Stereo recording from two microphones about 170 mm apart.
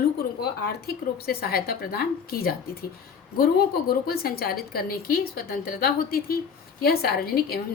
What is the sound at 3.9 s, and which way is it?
A woman's voice, 60° left (ahead or behind).